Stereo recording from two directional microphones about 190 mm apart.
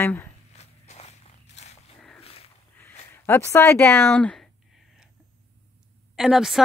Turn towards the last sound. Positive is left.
turn(degrees=0)  # may be behind; listen again after turning